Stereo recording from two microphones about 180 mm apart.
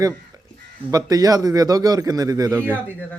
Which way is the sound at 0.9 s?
20° right (ahead or behind).